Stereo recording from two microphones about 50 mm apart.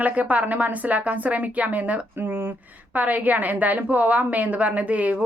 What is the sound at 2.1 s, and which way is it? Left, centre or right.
Speech, right.